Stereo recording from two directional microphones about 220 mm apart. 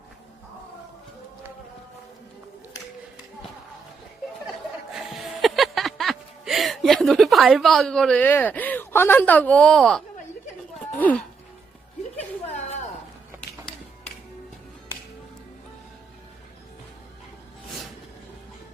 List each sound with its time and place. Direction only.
4.9 s music: centre (ahead or behind)
10.9 s speech: 5° left (ahead or behind)